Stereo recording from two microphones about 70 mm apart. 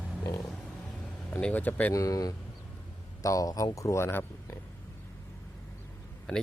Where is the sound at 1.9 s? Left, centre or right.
Left.